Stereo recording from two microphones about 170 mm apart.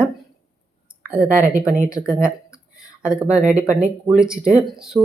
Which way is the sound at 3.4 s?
45° right (ahead or behind).